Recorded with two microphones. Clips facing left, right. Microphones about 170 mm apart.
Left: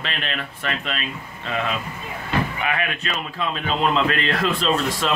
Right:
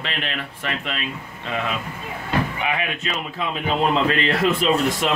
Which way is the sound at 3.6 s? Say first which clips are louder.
Right 1 dB; 20° right (ahead or behind).